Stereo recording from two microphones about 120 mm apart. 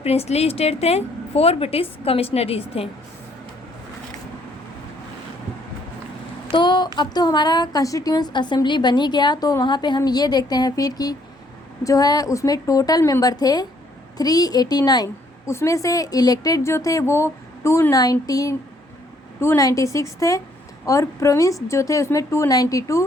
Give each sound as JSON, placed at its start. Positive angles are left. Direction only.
{"t": 0.0, "sound": "a woman's voice", "side_deg": 60}
{"t": 6.5, "sound": "a woman's voice", "side_deg": 40}